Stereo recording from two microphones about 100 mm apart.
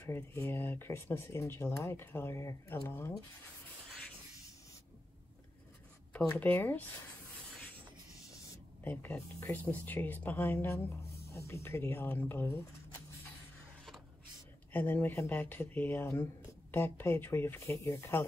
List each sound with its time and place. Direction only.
0.0 s speech: 25° left (ahead or behind)
6.1 s speech: 15° left (ahead or behind)
8.8 s speech: 15° left (ahead or behind)
14.7 s speech: 15° left (ahead or behind)